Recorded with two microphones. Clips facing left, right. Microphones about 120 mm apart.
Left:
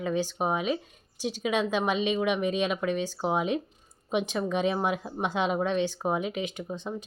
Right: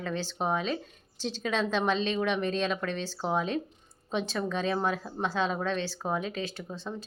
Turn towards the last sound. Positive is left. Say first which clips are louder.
# left 3 dB
turn(degrees=15)  # may be behind; listen again after turning